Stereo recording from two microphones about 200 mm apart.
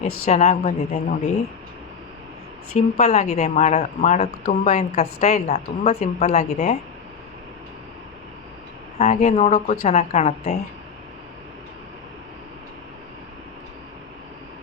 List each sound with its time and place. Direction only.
0.3 s a woman's voice: 35° left (ahead or behind)
3.0 s a woman's voice: 35° left (ahead or behind)
9.0 s a woman's voice: 35° left (ahead or behind)